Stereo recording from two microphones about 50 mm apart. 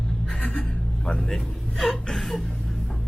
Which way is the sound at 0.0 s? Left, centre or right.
Centre.